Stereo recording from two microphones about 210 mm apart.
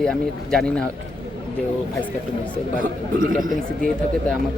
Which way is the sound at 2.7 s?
40° right (ahead or behind).